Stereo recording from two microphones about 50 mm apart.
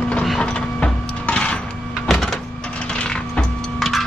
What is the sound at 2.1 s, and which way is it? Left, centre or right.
Power windows, centre.